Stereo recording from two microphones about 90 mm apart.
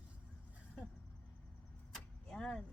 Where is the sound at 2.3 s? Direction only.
5° left (ahead or behind).